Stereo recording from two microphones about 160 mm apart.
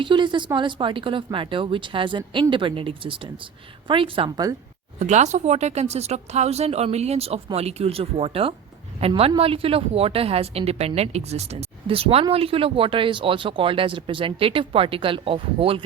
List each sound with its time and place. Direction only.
0.0 s speech: 30° right (ahead or behind)
4.9 s speech: 45° right (ahead or behind)